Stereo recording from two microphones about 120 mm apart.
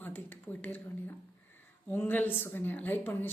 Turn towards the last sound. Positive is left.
turn(degrees=15)  # may be behind; listen again after turning